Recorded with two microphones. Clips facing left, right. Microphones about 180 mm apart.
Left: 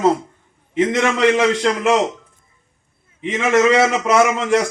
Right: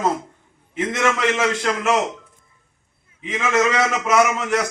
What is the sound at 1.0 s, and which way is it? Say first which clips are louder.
Speech: left 3 dB; 30° left (ahead or behind).